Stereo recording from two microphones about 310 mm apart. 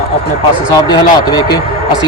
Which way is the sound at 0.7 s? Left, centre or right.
Centre.